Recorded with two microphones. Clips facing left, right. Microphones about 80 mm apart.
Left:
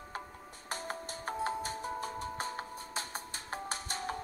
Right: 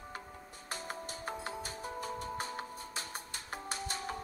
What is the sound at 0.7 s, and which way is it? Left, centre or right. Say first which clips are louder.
Music: left 2 dB; left.